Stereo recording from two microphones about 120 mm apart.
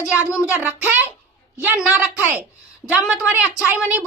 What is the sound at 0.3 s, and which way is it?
A woman's voice, 15° right (ahead or behind).